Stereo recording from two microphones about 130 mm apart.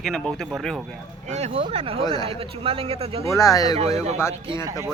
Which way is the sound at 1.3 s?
60° right (ahead or behind).